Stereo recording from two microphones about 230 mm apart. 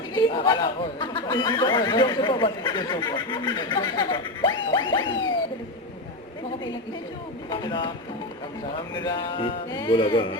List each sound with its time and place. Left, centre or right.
0.1 s speech: centre
7.5 s speech: centre
9.0 s speech: centre